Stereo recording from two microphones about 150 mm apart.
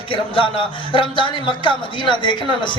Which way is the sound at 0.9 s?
35° left (ahead or behind).